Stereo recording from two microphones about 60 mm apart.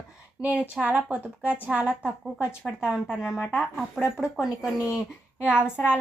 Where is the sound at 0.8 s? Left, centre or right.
Right.